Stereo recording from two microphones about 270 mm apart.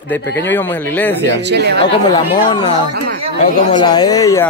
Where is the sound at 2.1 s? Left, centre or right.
Centre.